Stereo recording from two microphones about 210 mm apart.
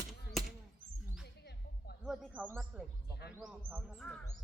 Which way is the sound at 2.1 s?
5° right (ahead or behind).